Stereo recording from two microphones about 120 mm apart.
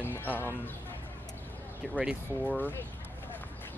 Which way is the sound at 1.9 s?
10° right (ahead or behind).